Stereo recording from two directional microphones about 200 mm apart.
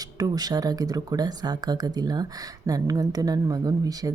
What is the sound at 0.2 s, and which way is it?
Speech, 20° right (ahead or behind).